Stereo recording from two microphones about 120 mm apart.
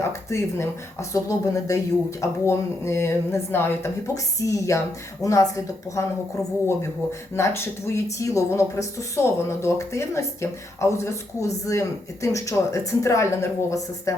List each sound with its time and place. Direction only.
0.1 s speech: 25° left (ahead or behind)
7.3 s speech: 20° left (ahead or behind)